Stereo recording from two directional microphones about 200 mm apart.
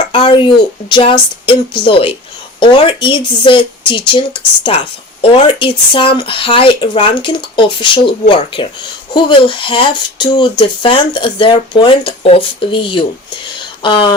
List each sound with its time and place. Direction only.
0.1 s speech: 25° left (ahead or behind)